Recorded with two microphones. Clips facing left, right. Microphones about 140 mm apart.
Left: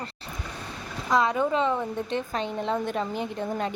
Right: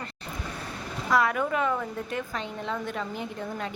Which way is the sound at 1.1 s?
20° left (ahead or behind).